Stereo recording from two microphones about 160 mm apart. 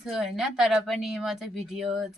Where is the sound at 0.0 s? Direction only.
Centre (ahead or behind).